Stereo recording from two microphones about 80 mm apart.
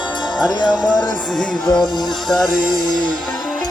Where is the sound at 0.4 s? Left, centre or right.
Left.